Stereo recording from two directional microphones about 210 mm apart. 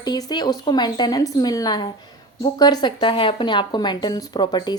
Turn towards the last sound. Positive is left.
turn(degrees=20)  # may be behind; listen again after turning